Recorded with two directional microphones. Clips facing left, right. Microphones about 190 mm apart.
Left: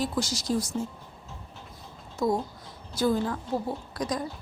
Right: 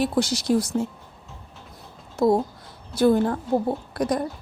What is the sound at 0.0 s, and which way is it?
Speech, 65° right (ahead or behind).